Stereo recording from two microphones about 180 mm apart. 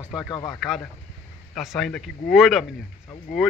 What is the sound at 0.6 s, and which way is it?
Speech, centre (ahead or behind).